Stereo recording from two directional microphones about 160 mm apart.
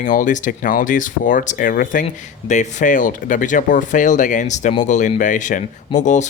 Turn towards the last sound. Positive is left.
turn(degrees=50)  # may be behind; listen again after turning